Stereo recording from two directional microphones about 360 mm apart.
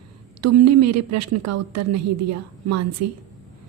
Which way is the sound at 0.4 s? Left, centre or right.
Right.